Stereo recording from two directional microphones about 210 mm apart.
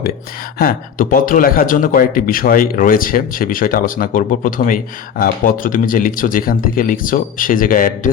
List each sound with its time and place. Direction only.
0.6 s speech: 45° left (ahead or behind)